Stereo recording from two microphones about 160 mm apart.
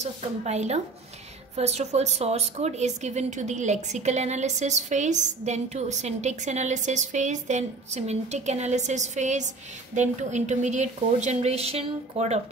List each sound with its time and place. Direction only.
0.0 s a woman's voice: 45° right (ahead or behind)